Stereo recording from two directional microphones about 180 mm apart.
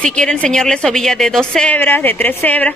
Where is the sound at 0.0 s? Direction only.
5° left (ahead or behind).